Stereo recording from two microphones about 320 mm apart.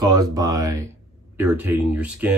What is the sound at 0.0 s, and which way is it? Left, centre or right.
Speech, centre.